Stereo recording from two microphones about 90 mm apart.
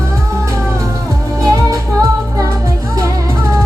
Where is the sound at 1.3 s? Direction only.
35° right (ahead or behind).